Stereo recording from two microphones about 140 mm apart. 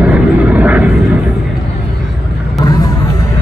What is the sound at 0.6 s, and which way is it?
Vehicle, 10° right (ahead or behind).